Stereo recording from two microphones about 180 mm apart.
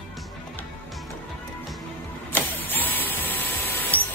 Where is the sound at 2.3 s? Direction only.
10° left (ahead or behind).